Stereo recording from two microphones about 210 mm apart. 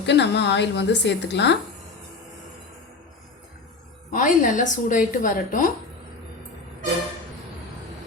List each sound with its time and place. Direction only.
0.0 s a woman's voice: 55° left (ahead or behind)
4.1 s a woman's voice: 35° left (ahead or behind)